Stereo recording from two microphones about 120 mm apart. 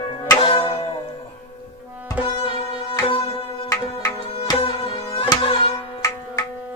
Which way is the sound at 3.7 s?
25° left (ahead or behind).